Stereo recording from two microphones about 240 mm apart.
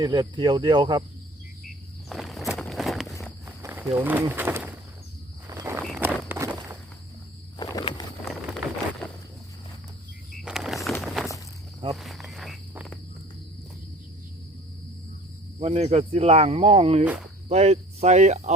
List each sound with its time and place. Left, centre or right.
0.0 s speech: centre
2.0 s walk: centre
3.4 s speech: centre
5.5 s walk: centre
7.6 s walk: centre
10.4 s walk: centre
11.9 s cricket: centre
15.5 s speech: right